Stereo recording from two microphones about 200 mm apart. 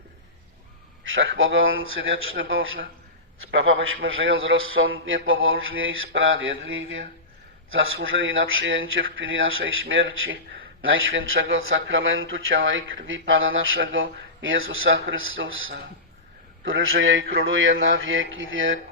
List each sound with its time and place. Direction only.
1.0 s a man's voice: 75° right (ahead or behind)